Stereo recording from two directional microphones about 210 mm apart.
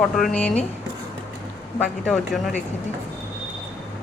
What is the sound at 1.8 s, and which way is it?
Speech, centre (ahead or behind).